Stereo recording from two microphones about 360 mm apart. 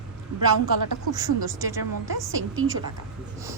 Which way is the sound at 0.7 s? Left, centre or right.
Right.